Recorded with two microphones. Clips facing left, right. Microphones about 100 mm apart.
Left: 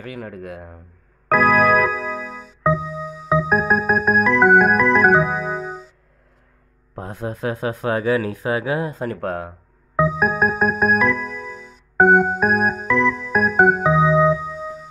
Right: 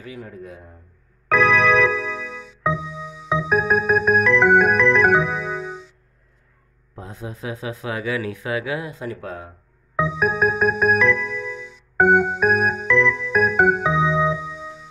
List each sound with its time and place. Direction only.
0.0 s speech: 70° left (ahead or behind)
1.3 s keyboard: 40° left (ahead or behind)
1.9 s music: 40° left (ahead or behind)
5.1 s keyboard: 40° left (ahead or behind)
7.0 s speech: 55° left (ahead or behind)
10.0 s music: 40° left (ahead or behind)
14.0 s music: 5° left (ahead or behind)
14.4 s music: 40° left (ahead or behind)